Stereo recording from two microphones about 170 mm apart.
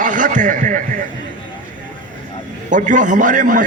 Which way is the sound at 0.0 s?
50° right (ahead or behind).